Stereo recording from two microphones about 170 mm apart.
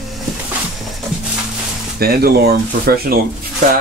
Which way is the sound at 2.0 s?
65° right (ahead or behind).